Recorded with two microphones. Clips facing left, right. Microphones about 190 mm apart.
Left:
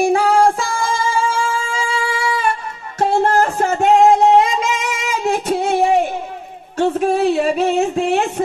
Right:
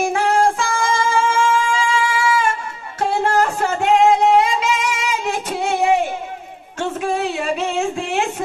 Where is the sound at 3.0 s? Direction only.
45° left (ahead or behind).